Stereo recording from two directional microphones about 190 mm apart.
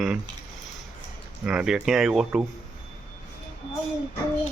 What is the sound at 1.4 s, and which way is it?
Speech, 5° right (ahead or behind).